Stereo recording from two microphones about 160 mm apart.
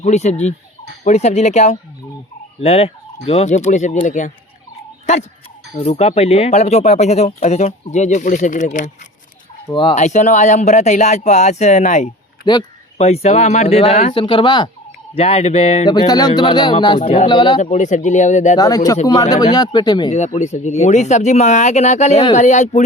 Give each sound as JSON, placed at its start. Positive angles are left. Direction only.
{"t": 0.0, "sound": "speech", "side_deg": 45}
{"t": 9.9, "sound": "speech", "side_deg": 50}
{"t": 12.4, "sound": "speech", "side_deg": 25}
{"t": 13.0, "sound": "speech", "side_deg": 40}
{"t": 14.1, "sound": "speech", "side_deg": 30}
{"t": 15.9, "sound": "speech", "side_deg": 25}
{"t": 17.0, "sound": "speech", "side_deg": 45}
{"t": 17.2, "sound": "speech", "side_deg": 30}
{"t": 17.6, "sound": "speech", "side_deg": 50}
{"t": 18.5, "sound": "speech", "side_deg": 20}
{"t": 20.1, "sound": "speech", "side_deg": 45}